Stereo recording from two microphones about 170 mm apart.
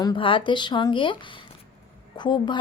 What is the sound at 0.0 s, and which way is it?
Speech, 30° left (ahead or behind).